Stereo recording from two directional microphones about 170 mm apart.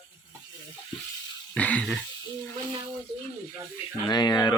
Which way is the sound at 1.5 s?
10° left (ahead or behind).